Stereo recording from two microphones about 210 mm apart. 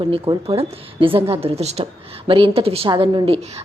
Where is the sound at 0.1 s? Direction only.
25° right (ahead or behind).